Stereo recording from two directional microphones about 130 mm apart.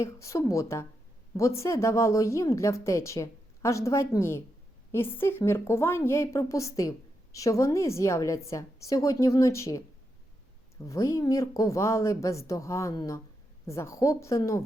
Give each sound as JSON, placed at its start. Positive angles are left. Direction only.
{"t": 0.0, "sound": "speech", "side_deg": 20}
{"t": 10.8, "sound": "speech", "side_deg": 25}